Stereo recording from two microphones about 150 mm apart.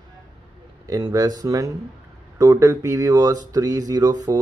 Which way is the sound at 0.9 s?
25° right (ahead or behind).